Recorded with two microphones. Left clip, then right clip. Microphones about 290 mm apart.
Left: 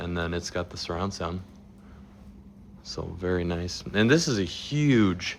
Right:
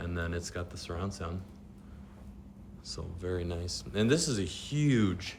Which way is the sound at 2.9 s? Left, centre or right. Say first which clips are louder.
Left 8 dB; left.